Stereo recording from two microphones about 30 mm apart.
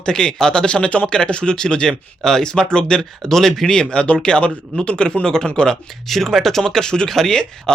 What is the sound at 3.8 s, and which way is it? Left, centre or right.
Speech, left.